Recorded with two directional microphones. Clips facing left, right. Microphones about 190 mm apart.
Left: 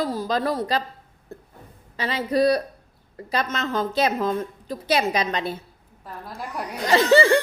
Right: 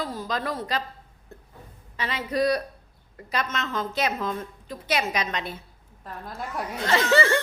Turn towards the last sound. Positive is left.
turn(degrees=35)  # may be behind; listen again after turning